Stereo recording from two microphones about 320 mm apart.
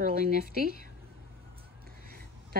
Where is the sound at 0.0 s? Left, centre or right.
Right.